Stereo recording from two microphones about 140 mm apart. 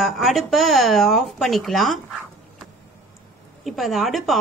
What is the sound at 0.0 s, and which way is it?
A woman's voice, centre (ahead or behind).